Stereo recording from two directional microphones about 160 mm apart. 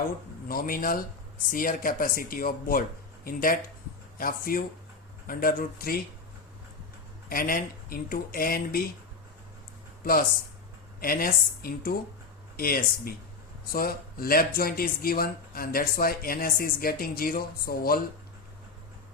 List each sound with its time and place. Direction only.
0.4 s speech: 65° left (ahead or behind)
7.3 s speech: 60° left (ahead or behind)
10.0 s speech: 70° left (ahead or behind)